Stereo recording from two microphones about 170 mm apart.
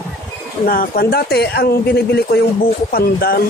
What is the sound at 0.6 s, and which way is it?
Speech, 55° left (ahead or behind).